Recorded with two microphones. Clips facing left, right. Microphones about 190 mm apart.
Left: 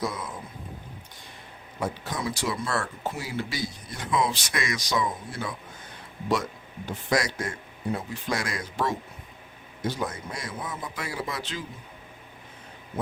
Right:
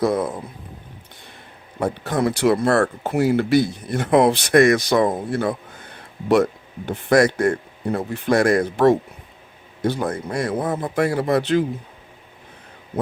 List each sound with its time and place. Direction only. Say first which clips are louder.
0.0 s speech: right 12 dB; 60° right (ahead or behind)
1.8 s speech: right 10 dB; 60° right (ahead or behind)